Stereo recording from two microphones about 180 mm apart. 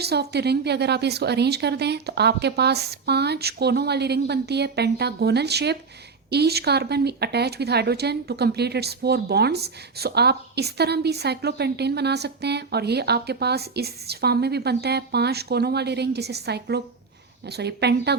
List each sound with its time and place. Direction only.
0.0 s a woman's voice: 65° right (ahead or behind)